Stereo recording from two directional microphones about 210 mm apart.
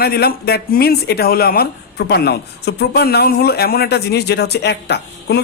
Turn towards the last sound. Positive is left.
turn(degrees=50)  # may be behind; listen again after turning